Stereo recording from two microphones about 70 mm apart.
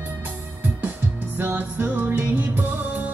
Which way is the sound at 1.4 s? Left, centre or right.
Right.